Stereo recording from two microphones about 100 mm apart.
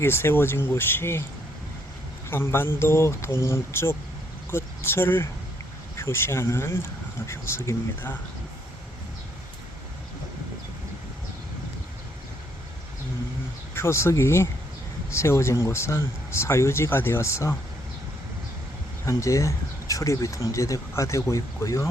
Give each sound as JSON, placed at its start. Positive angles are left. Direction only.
{"t": 0.0, "sound": "speech", "side_deg": 25}
{"t": 2.3, "sound": "speech", "side_deg": 25}
{"t": 13.7, "sound": "speech", "side_deg": 25}
{"t": 19.0, "sound": "speech", "side_deg": 30}